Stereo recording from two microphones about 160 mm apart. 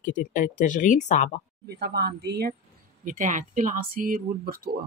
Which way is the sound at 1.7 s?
90° right.